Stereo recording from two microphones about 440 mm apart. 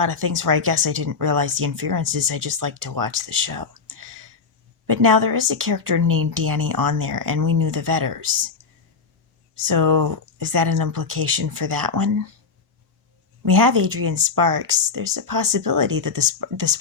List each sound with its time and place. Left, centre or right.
0.3 s speech: right
6.1 s speech: right
6.5 s speech: right
9.6 s speech: right
13.4 s speech: right